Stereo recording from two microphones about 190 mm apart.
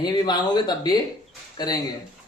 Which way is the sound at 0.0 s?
20° left (ahead or behind).